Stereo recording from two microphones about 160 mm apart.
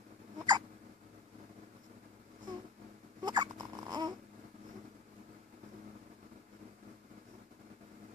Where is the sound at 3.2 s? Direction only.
25° right (ahead or behind).